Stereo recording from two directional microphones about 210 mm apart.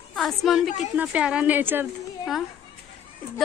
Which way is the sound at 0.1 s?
Centre (ahead or behind).